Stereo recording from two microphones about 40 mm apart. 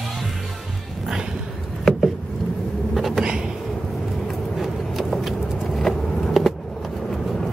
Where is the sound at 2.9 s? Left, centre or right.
Centre.